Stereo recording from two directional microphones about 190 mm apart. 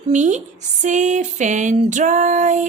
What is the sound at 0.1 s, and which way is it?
Speech, 40° right (ahead or behind).